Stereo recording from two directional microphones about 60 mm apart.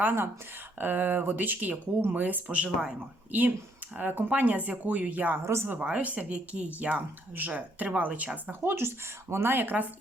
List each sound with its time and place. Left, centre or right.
0.0 s a woman's voice: right
8.4 s speech: right